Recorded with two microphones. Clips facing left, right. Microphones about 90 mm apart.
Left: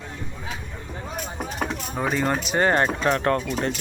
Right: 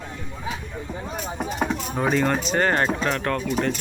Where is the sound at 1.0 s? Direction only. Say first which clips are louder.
Right 1 dB; 5° right (ahead or behind).